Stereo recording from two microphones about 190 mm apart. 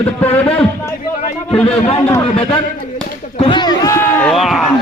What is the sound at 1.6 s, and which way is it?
Speech, 30° left (ahead or behind).